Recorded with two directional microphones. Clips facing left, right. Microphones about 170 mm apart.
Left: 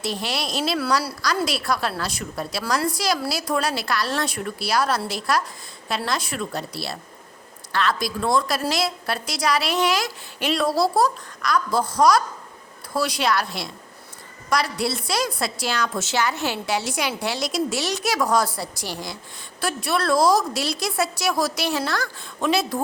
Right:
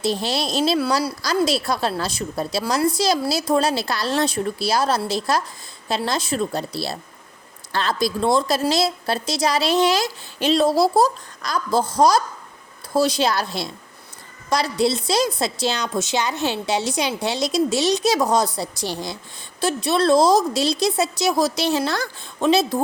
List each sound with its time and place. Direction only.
0.0 s a woman's voice: 25° right (ahead or behind)